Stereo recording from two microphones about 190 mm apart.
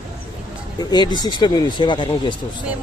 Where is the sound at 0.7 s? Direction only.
20° left (ahead or behind).